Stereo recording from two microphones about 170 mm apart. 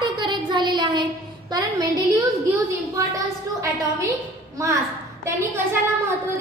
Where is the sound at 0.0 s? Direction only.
25° right (ahead or behind).